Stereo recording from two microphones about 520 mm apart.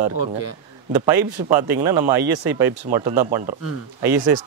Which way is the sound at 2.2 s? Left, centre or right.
Right.